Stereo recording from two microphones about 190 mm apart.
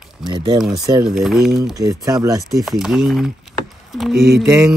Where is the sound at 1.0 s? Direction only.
Centre (ahead or behind).